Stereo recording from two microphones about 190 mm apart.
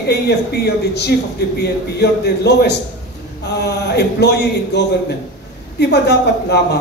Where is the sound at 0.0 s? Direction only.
60° left (ahead or behind).